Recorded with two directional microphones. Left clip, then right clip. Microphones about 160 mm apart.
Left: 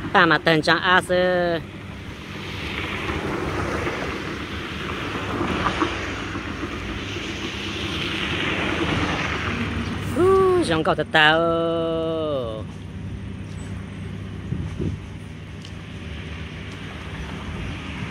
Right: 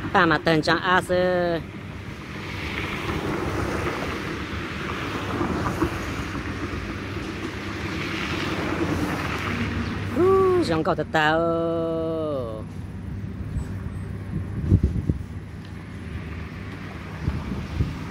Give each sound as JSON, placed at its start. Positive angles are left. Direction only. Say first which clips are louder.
{"t": 0.1, "sound": "speech", "louder": "left 3 dB", "side_deg": 0}
{"t": 2.6, "sound": "vehicle", "louder": "left 2 dB", "side_deg": -25}
{"t": 3.7, "sound": "vehicle", "louder": "left 1 dB", "side_deg": 45}
{"t": 4.6, "sound": "vehicle", "louder": "left 1 dB", "side_deg": -25}
{"t": 5.4, "sound": "wind noise", "louder": "left 4 dB", "side_deg": 15}
{"t": 5.7, "sound": "vehicle", "louder": "left 3 dB", "side_deg": 40}
{"t": 7.6, "sound": "vehicle", "louder": "left 4 dB", "side_deg": -30}
{"t": 8.8, "sound": "vehicle", "louder": "left 3 dB", "side_deg": 25}
{"t": 9.1, "sound": "vehicle", "louder": "left 3 dB", "side_deg": 45}
{"t": 10.1, "sound": "a sound", "louder": "left 2 dB", "side_deg": 0}